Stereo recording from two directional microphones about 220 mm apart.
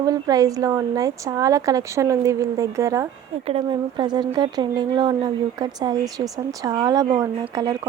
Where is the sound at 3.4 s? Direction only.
25° right (ahead or behind).